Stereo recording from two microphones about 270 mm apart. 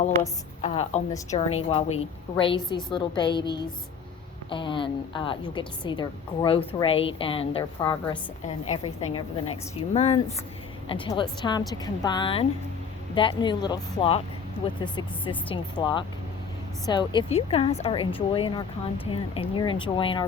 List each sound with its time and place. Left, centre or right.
0.6 s a woman's voice: left
1.1 s a woman's voice: centre